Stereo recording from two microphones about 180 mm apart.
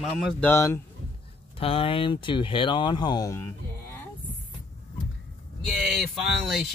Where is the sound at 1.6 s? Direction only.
30° left (ahead or behind).